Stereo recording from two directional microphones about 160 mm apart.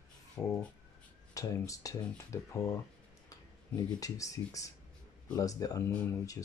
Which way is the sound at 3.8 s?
20° left (ahead or behind).